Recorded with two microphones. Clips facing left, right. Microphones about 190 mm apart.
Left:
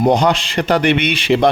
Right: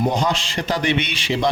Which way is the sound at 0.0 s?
65° left (ahead or behind).